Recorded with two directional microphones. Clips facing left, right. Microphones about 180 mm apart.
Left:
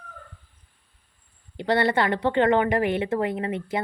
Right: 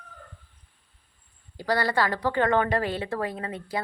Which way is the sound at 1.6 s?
25° left (ahead or behind).